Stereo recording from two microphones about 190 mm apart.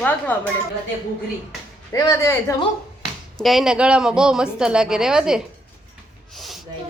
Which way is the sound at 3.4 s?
Centre (ahead or behind).